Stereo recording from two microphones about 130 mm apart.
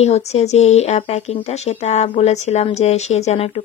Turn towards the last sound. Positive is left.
turn(degrees=55)  # may be behind; listen again after turning